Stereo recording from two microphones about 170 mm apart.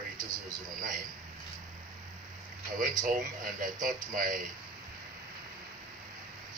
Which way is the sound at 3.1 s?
50° right (ahead or behind).